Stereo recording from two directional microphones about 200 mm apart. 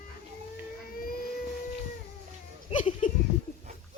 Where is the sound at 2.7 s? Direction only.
30° left (ahead or behind).